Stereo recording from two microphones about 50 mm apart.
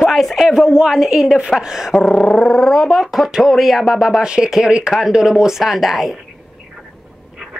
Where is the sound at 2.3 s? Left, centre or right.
Centre.